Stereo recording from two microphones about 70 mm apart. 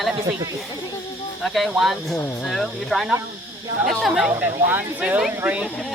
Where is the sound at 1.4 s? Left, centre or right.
Centre.